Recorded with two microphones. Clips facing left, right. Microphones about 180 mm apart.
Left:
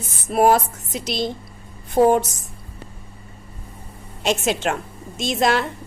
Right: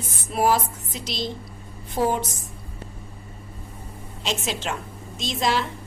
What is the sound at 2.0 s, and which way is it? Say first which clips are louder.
Speech: left 8 dB; 55° left (ahead or behind).